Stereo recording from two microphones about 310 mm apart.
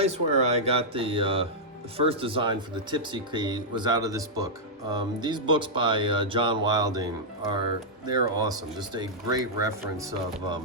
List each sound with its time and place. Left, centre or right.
0.0 s speech: right